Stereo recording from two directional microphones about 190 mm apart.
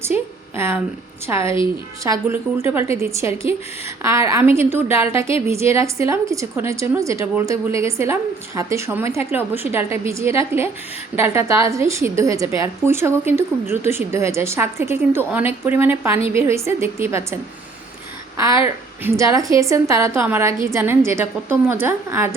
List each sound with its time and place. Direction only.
0.0 s a sound: 15° right (ahead or behind)
1.3 s a woman's voice: 15° right (ahead or behind)
18.6 s a woman's voice: 15° right (ahead or behind)